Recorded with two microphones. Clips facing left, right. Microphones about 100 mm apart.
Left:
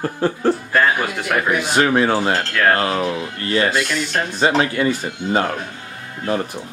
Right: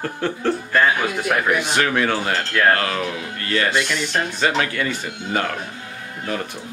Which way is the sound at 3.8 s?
5° left (ahead or behind).